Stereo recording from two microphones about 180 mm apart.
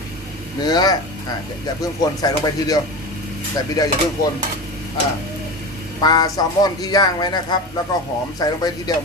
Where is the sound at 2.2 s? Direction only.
20° left (ahead or behind).